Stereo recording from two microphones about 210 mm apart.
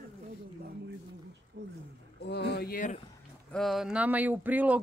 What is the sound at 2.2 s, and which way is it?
Speech, 50° left (ahead or behind).